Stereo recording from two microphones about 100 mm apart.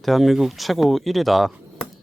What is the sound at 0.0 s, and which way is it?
Speech, centre (ahead or behind).